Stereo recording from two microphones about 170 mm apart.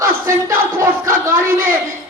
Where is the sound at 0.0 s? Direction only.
15° right (ahead or behind).